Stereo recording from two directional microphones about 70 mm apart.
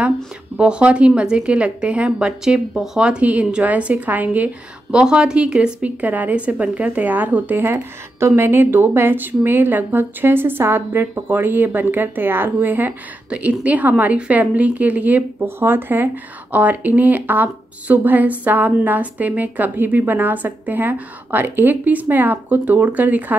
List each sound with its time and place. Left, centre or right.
0.6 s a woman's voice: centre
4.9 s a woman's voice: centre
13.3 s a woman's voice: centre